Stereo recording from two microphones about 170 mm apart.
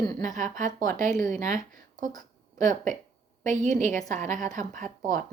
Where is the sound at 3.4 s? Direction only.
50° right (ahead or behind).